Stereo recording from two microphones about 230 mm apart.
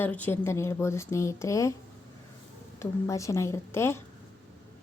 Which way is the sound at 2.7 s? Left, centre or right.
Centre.